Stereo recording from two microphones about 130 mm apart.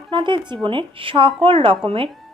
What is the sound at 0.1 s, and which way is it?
A woman's voice, 35° right (ahead or behind).